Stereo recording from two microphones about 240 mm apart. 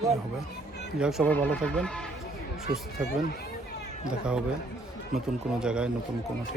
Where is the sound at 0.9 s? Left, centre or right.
Centre.